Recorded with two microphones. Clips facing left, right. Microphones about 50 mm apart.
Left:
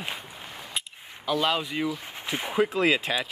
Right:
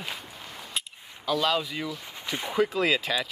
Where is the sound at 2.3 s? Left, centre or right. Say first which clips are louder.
Left 1 dB; left.